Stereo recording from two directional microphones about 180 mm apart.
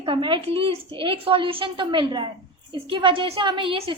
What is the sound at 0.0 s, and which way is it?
A woman's voice, 30° right (ahead or behind).